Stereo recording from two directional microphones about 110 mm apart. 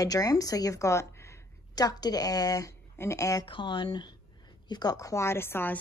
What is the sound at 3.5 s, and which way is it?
Speech, 45° left (ahead or behind).